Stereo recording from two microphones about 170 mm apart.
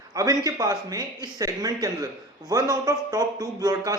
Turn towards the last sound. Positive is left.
turn(degrees=-20)  # may be behind; listen again after turning